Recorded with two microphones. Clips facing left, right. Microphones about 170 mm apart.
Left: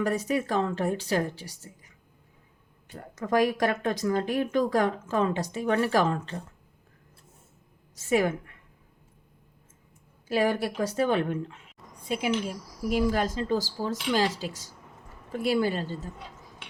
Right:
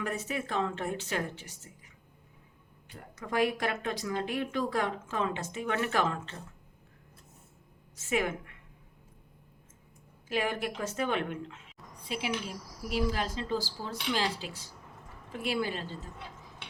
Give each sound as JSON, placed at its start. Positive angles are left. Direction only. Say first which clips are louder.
{"t": 0.0, "sound": "speech", "louder": "left 8 dB", "side_deg": 40}
{"t": 3.2, "sound": "speech", "louder": "left 6 dB", "side_deg": 45}
{"t": 7.9, "sound": "speech", "louder": "left 6 dB", "side_deg": 40}
{"t": 10.2, "sound": "speech", "louder": "left 6 dB", "side_deg": 40}
{"t": 12.0, "sound": "speech", "louder": "left 7 dB", "side_deg": 45}